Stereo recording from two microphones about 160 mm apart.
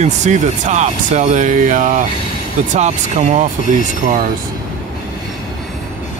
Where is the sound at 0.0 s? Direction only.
50° right (ahead or behind).